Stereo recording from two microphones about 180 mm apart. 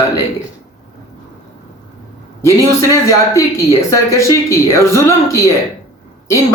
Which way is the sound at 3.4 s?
15° left (ahead or behind).